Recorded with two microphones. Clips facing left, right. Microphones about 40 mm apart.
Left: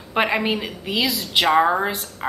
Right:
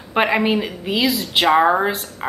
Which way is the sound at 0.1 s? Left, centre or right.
Centre.